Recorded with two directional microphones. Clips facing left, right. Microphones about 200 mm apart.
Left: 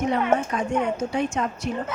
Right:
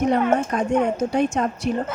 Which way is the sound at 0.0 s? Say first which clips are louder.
Right 3 dB; 40° right (ahead or behind).